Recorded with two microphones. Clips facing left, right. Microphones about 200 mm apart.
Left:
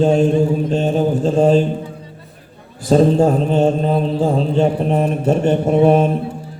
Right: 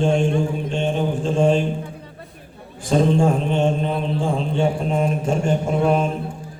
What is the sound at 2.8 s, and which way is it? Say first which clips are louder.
A man's voice: left 5 dB; 35° left (ahead or behind).